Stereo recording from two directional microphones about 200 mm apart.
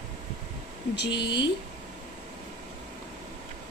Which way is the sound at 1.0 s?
60° left (ahead or behind).